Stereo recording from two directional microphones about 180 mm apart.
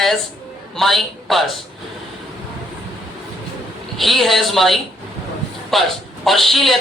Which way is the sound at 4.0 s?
Centre (ahead or behind).